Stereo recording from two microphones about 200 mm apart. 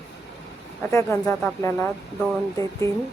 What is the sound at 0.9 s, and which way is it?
Speech, 15° left (ahead or behind).